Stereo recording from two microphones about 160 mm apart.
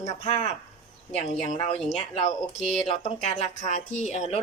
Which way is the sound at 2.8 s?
45° left (ahead or behind).